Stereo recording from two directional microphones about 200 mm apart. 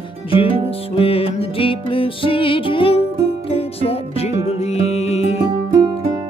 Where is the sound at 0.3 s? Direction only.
25° left (ahead or behind).